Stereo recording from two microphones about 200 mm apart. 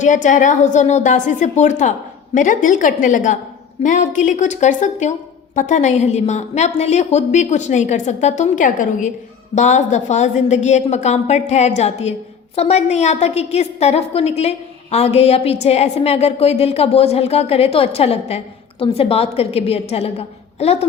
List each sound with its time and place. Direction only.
0.0 s a woman's voice: 40° left (ahead or behind)